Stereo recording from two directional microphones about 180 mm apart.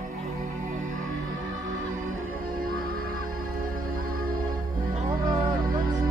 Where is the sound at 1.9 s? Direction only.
50° right (ahead or behind).